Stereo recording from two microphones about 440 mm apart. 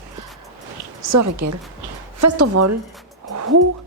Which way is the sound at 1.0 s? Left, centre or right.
Right.